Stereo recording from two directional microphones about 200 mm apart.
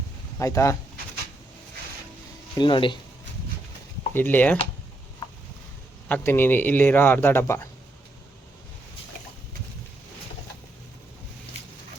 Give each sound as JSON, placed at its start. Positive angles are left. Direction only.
{"t": 0.3, "sound": "a man's voice", "side_deg": 15}
{"t": 2.6, "sound": "speech", "side_deg": 25}
{"t": 4.1, "sound": "a man's voice", "side_deg": 10}
{"t": 6.1, "sound": "a man's voice", "side_deg": 10}